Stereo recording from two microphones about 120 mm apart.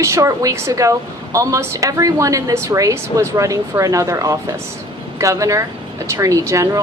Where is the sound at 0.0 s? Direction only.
25° right (ahead or behind).